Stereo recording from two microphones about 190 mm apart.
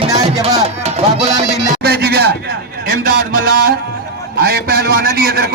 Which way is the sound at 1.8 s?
55° right (ahead or behind).